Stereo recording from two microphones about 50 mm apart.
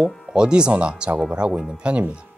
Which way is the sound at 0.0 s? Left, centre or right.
Centre.